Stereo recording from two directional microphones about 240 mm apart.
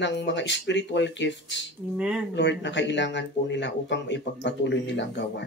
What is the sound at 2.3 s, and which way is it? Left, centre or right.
Speech, left.